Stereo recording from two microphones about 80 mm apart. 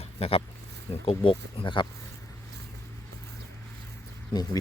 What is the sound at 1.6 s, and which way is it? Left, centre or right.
Speech, left.